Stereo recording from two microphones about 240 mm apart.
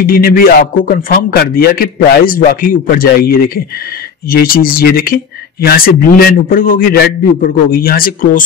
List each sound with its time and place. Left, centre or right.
0.0 s a man's voice: left